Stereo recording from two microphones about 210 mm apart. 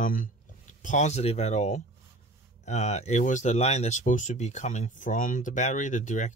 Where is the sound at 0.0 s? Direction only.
40° left (ahead or behind).